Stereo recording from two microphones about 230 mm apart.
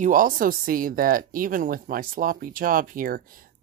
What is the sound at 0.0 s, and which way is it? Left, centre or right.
Speech, right.